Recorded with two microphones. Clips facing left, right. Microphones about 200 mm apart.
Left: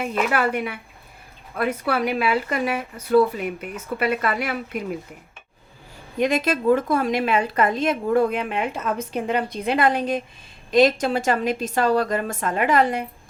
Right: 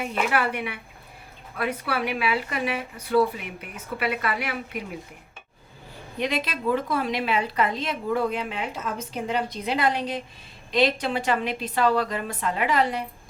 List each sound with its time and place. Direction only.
0.3 s a woman's voice: 45° left (ahead or behind)
6.1 s a woman's voice: 45° left (ahead or behind)